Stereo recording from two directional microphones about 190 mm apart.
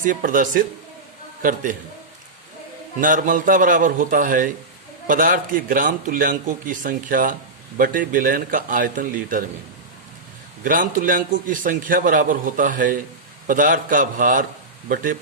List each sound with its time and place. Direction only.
0.0 s a man's voice: 45° right (ahead or behind)
3.0 s a man's voice: 45° right (ahead or behind)
10.6 s a man's voice: 45° right (ahead or behind)